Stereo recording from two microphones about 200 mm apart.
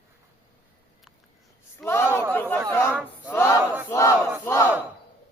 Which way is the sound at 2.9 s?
5° right (ahead or behind).